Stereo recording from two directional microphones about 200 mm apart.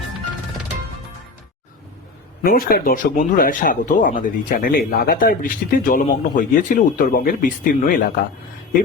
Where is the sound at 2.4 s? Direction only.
45° left (ahead or behind).